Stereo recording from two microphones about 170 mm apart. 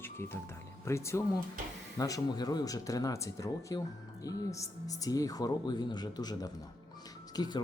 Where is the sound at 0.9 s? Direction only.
15° left (ahead or behind).